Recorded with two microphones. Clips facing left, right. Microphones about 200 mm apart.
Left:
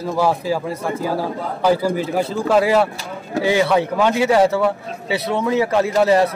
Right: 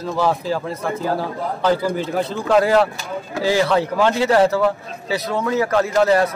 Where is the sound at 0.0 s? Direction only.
10° left (ahead or behind).